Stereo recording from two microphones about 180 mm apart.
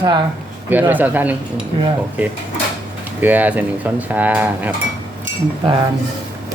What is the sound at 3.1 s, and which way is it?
Speech, 10° right (ahead or behind).